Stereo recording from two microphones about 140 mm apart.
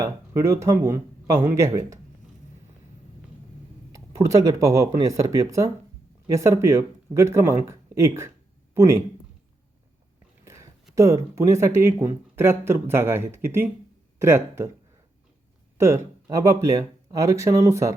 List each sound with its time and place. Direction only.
0.0 s speech: 20° right (ahead or behind)
3.9 s speech: 25° right (ahead or behind)
10.4 s a sound: 20° right (ahead or behind)
10.9 s speech: 20° right (ahead or behind)
15.8 s speech: 20° right (ahead or behind)